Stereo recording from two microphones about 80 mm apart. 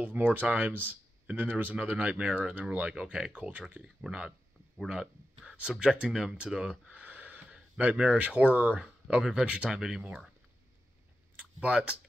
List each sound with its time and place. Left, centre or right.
0.0 s speech: right; by 10.0 s centre
11.3 s speech: centre